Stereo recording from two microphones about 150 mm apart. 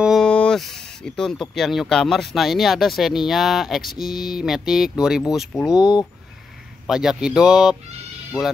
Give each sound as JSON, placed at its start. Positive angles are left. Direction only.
{"t": 0.0, "sound": "speech", "side_deg": 0}
{"t": 5.8, "sound": "speech", "side_deg": 25}
{"t": 6.9, "sound": "speech", "side_deg": -5}